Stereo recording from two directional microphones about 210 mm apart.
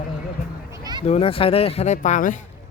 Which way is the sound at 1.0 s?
30° left (ahead or behind).